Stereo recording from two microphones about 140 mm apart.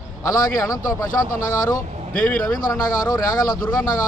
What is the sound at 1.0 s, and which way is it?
Speech, 25° left (ahead or behind).